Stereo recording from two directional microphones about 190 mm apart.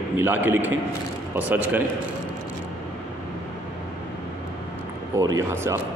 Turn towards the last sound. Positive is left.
turn(degrees=-15)  # may be behind; listen again after turning